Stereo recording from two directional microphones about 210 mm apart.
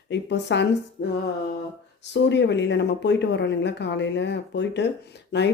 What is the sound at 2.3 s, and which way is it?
Speech, 55° left (ahead or behind).